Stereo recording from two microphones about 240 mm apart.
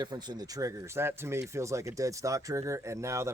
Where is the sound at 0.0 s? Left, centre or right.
Centre.